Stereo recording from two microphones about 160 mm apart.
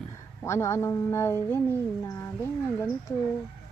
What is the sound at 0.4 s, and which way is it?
A woman's voice, 20° left (ahead or behind).